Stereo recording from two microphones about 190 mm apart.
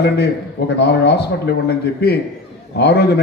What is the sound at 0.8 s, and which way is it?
A man's voice, 60° left (ahead or behind).